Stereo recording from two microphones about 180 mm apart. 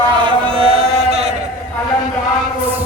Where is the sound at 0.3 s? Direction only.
30° right (ahead or behind).